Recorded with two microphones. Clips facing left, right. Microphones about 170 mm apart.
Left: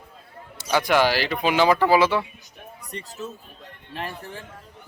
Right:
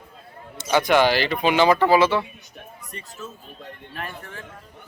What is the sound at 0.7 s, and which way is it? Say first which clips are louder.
Speech: right 2 dB; 5° left (ahead or behind).